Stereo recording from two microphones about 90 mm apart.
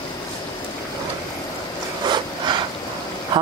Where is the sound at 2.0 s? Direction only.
55° right (ahead or behind).